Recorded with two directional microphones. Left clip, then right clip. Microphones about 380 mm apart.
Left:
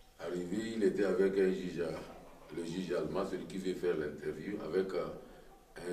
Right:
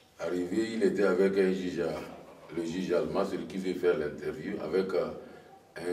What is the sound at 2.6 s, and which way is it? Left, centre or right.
A man's voice, centre.